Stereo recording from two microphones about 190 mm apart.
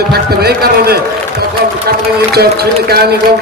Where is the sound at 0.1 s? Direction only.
55° right (ahead or behind).